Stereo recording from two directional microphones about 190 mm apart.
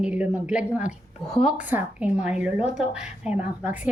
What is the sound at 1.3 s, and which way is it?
Speech, 35° left (ahead or behind).